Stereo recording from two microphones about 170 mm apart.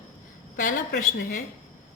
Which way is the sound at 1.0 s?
50° left (ahead or behind).